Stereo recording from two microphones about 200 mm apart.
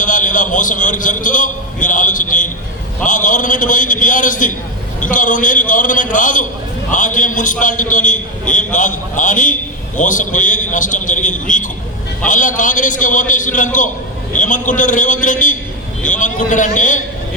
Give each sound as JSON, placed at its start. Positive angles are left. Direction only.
{"t": 0.0, "sound": "a man's voice", "side_deg": 40}